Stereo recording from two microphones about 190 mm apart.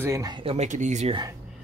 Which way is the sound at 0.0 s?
15° right (ahead or behind).